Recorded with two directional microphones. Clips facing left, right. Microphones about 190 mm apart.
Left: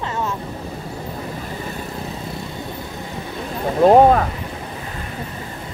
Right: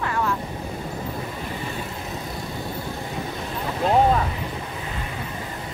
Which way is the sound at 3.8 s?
50° left (ahead or behind).